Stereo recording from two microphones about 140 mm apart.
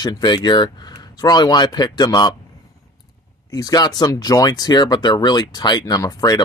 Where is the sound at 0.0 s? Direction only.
30° left (ahead or behind).